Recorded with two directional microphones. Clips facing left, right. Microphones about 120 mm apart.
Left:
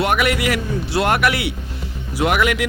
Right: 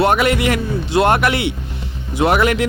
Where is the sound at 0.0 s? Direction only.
30° right (ahead or behind).